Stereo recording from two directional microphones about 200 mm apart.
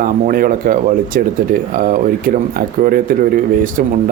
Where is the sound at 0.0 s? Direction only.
45° right (ahead or behind).